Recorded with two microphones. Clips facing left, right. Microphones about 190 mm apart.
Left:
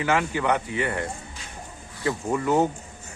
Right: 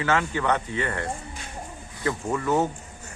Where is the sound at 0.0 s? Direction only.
15° left (ahead or behind).